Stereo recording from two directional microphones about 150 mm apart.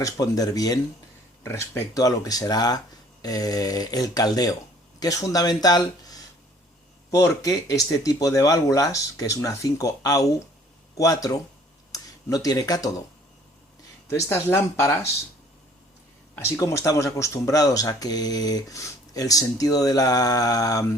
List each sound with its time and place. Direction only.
0.0 s speech: 25° left (ahead or behind)
14.1 s speech: 15° left (ahead or behind)
16.4 s speech: 20° left (ahead or behind)